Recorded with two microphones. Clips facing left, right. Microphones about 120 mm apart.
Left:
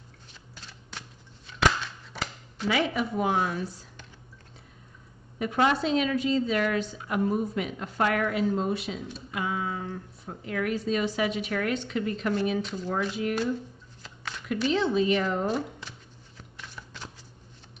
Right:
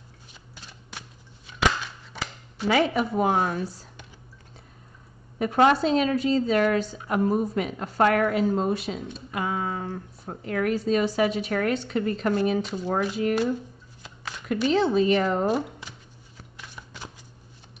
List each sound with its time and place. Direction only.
0.3 s shuffling cards: 10° right (ahead or behind)
1.5 s a sound: 15° right (ahead or behind)
2.1 s dishes: 5° right (ahead or behind)
2.7 s speech: 40° right (ahead or behind)
5.4 s a woman's voice: 45° right (ahead or behind)
14.7 s speech: 40° right (ahead or behind)
16.5 s a sound: 10° right (ahead or behind)